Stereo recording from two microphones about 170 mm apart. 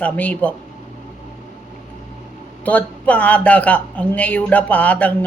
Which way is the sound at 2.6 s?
10° left (ahead or behind).